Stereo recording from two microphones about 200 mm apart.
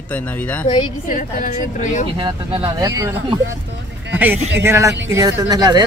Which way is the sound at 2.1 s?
25° right (ahead or behind).